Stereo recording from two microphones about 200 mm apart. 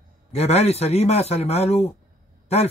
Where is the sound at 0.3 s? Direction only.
30° left (ahead or behind).